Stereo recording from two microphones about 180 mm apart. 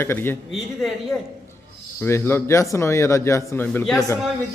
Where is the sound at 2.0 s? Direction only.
15° left (ahead or behind).